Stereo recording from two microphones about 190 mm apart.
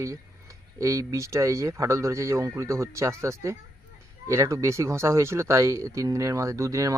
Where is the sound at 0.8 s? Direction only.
15° right (ahead or behind).